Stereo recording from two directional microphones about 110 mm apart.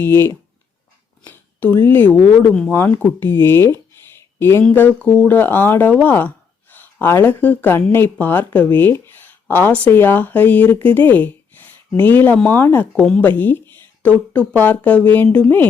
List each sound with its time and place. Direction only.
0.0 s speech: 20° left (ahead or behind); by 2.7 s 5° left (ahead or behind)
2.7 s speech: 20° left (ahead or behind)